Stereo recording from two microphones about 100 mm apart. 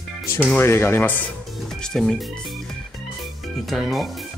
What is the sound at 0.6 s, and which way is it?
Speech, 25° left (ahead or behind).